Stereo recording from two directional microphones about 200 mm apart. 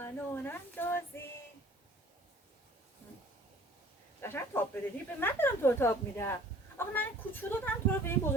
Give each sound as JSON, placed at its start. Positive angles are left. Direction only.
{"t": 0.0, "sound": "speech", "side_deg": 10}
{"t": 4.2, "sound": "speech", "side_deg": 10}